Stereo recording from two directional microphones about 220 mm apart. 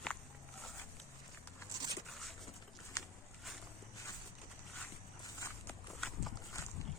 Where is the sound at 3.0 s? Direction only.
15° left (ahead or behind).